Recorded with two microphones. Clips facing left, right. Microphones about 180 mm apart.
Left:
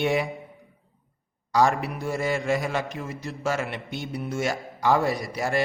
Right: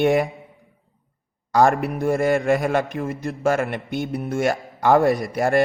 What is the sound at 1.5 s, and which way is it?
A man's voice, 50° right (ahead or behind).